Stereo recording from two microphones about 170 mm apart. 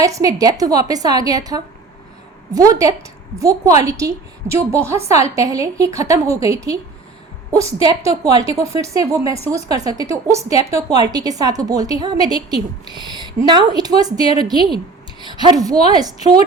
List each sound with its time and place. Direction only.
0.0 s a woman's voice: 20° right (ahead or behind)